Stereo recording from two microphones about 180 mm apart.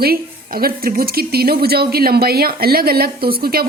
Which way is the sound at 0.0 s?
55° right (ahead or behind).